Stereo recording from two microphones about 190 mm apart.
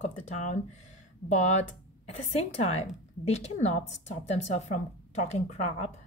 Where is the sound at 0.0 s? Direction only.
35° left (ahead or behind).